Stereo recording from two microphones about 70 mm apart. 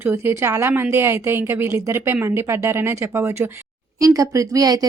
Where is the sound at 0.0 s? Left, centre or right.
Right.